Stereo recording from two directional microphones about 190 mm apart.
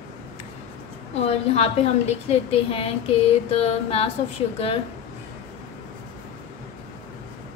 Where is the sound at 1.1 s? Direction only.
35° left (ahead or behind).